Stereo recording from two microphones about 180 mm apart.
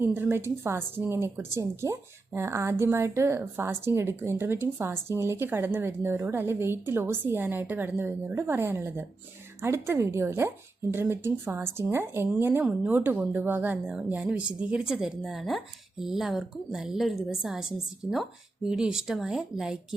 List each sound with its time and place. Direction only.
0.0 s a woman's voice: 10° right (ahead or behind)